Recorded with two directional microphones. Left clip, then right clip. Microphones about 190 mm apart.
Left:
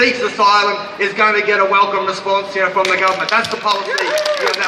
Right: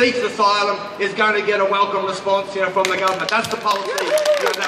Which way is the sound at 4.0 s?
45° right (ahead or behind).